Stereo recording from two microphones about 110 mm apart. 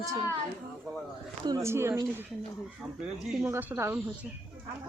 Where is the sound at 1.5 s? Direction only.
25° right (ahead or behind).